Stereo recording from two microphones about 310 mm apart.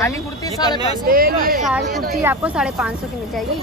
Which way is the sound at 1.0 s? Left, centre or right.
Right.